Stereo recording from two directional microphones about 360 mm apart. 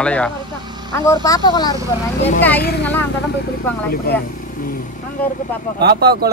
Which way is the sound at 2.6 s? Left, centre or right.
Left.